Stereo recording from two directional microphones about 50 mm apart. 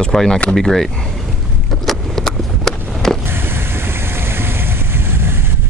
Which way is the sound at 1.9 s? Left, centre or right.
Centre.